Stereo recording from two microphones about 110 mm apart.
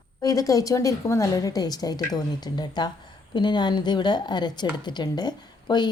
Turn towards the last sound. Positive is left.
turn(degrees=40)  # may be behind; listen again after turning